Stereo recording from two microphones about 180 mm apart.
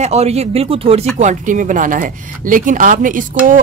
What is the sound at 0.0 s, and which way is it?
Speech, 35° right (ahead or behind).